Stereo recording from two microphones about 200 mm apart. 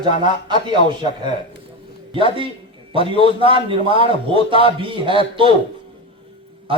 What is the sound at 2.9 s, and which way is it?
Speech, 25° right (ahead or behind).